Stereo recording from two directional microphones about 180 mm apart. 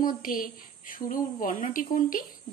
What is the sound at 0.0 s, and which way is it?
Speech, 50° left (ahead or behind).